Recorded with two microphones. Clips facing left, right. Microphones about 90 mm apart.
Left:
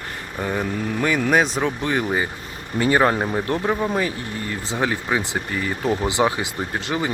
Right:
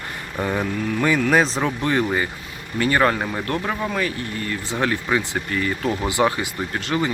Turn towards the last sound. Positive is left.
turn(degrees=15)  # may be behind; listen again after turning